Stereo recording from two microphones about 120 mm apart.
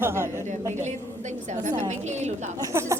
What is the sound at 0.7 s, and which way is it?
A woman's voice, 75° right (ahead or behind).